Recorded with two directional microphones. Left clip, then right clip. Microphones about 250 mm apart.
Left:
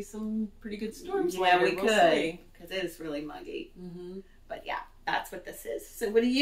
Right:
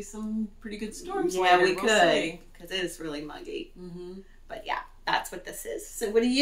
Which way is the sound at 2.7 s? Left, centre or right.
Centre.